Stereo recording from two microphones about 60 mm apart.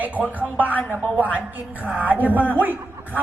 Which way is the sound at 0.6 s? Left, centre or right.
Left.